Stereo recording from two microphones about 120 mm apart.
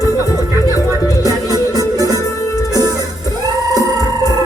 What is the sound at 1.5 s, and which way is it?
Music, 30° right (ahead or behind).